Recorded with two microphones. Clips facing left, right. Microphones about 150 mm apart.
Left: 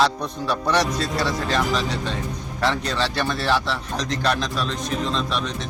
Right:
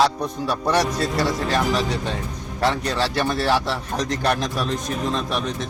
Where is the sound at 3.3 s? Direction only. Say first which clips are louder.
Right 2 dB; 50° right (ahead or behind).